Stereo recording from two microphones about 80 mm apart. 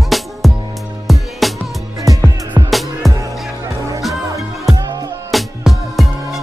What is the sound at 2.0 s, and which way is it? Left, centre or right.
Music, right.